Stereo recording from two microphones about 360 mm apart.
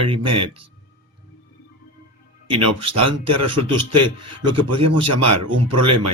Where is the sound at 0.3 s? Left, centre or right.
Centre.